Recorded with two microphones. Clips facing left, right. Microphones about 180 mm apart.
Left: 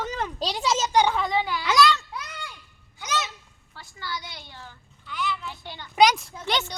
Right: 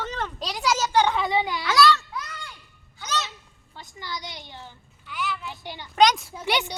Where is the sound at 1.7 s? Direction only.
20° left (ahead or behind).